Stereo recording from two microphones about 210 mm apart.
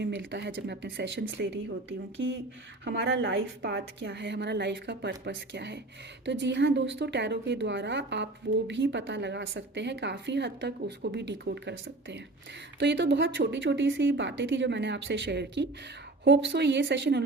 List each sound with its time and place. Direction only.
0.0 s a woman's voice: 60° right (ahead or behind)